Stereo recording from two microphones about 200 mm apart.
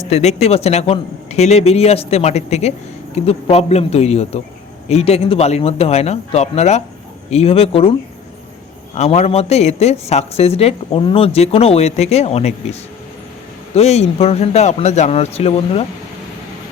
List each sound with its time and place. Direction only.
0.1 s speech: 30° left (ahead or behind)
9.0 s speech: 30° left (ahead or behind)
13.7 s speech: 35° left (ahead or behind)